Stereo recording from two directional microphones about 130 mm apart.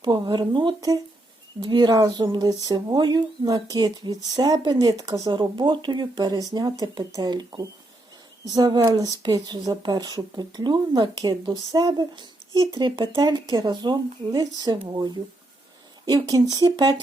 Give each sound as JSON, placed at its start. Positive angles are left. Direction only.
{"t": 0.0, "sound": "speech", "side_deg": -35}